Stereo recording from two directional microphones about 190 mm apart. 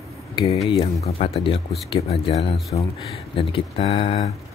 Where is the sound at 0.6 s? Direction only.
35° left (ahead or behind).